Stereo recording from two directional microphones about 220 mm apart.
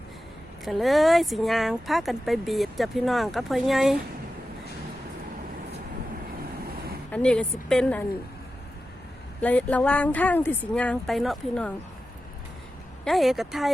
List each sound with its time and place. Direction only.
0.6 s speech: centre (ahead or behind)
7.1 s speech: 5° left (ahead or behind)
9.4 s speech: 5° left (ahead or behind)
13.1 s speech: centre (ahead or behind)